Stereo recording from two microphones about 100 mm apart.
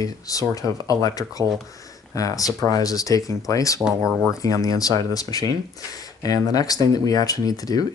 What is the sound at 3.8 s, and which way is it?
Speech, 5° right (ahead or behind).